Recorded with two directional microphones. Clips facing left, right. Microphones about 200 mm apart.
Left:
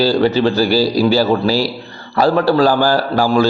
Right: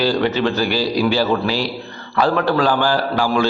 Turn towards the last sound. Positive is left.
turn(degrees=40)  # may be behind; listen again after turning